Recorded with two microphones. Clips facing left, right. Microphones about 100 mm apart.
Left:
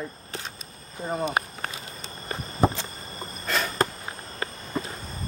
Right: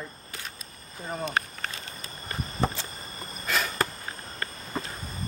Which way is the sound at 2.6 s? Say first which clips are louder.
Left 6 dB; 10° left (ahead or behind).